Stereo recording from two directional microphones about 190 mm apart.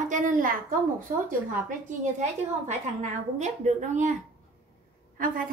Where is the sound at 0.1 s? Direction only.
45° right (ahead or behind).